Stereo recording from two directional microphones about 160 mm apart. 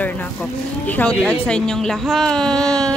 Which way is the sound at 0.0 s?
10° left (ahead or behind).